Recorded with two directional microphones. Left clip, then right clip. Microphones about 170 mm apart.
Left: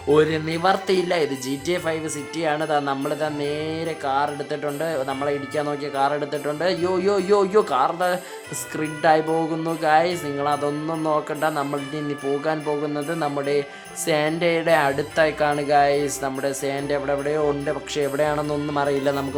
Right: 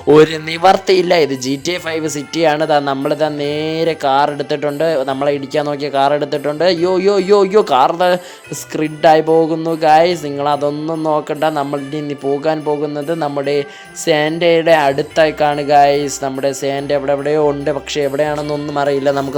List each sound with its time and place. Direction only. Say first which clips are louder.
0.1 s a man's voice: right 9 dB; 35° right (ahead or behind)
13.1 s speech: right 8 dB; 25° right (ahead or behind)